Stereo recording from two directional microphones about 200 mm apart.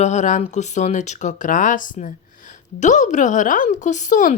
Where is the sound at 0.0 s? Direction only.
35° left (ahead or behind).